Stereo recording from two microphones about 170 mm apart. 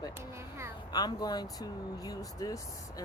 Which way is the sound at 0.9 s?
25° left (ahead or behind).